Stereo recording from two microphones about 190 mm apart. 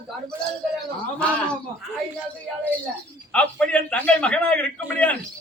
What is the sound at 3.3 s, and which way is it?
A man's voice, 5° left (ahead or behind).